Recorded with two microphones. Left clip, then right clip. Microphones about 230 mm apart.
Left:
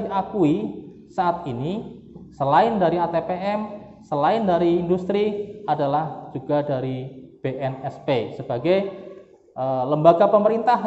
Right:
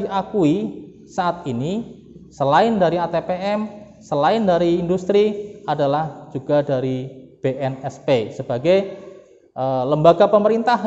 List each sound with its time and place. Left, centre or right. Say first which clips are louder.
0.0 s a man's voice: right 2 dB; right